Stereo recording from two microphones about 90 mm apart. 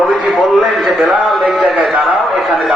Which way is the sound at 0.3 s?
Centre (ahead or behind).